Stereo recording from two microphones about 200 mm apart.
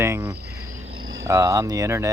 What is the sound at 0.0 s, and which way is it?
Speech, 10° right (ahead or behind).